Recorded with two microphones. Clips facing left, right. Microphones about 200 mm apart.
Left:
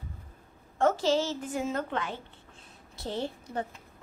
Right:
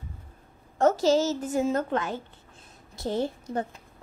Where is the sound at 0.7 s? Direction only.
40° right (ahead or behind).